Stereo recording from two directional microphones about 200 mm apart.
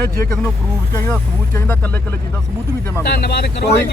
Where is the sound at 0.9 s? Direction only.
10° left (ahead or behind).